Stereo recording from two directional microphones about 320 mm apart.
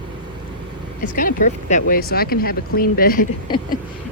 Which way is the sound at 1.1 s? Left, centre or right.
Left.